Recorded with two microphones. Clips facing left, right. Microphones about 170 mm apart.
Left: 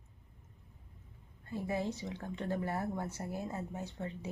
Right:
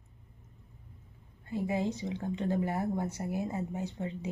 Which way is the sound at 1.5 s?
15° right (ahead or behind).